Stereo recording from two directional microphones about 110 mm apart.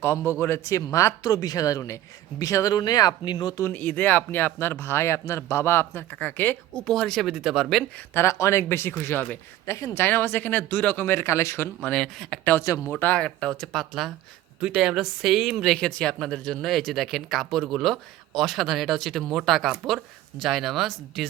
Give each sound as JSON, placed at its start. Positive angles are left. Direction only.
{"t": 0.0, "sound": "speech", "side_deg": 25}
{"t": 3.6, "sound": "speech", "side_deg": 15}
{"t": 6.8, "sound": "speech", "side_deg": 5}
{"t": 7.9, "sound": "speech", "side_deg": 20}
{"t": 11.8, "sound": "speech", "side_deg": 5}
{"t": 12.5, "sound": "speech", "side_deg": 25}
{"t": 12.9, "sound": "speech", "side_deg": 15}